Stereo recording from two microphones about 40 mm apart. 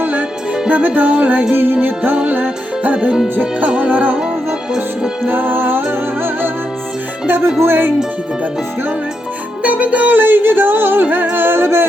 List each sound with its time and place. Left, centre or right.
0.0 s music: right
2.9 s music: right
3.8 s music: right
5.2 s music: right
7.3 s speech: right
7.6 s music: right
9.6 s music: right
10.2 s music: right